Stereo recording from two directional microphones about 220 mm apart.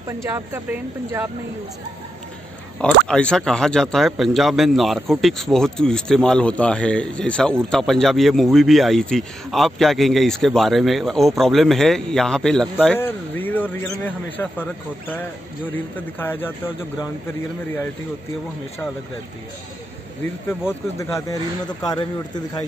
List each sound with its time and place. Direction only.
0.2 s speech: 10° right (ahead or behind)
3.1 s a man's voice: 5° left (ahead or behind)
21.0 s speech: 15° left (ahead or behind)